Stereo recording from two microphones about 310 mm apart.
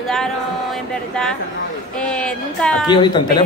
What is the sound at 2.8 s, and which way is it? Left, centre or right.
Speech, centre.